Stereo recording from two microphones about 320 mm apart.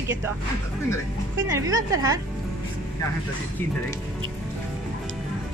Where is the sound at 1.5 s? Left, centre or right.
Centre.